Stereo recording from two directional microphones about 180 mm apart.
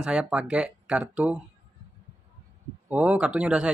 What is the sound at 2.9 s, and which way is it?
Speech, 10° right (ahead or behind).